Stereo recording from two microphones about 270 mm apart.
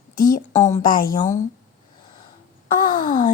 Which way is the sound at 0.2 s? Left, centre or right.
Left.